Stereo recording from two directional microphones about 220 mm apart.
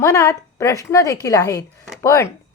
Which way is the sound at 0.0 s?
15° left (ahead or behind).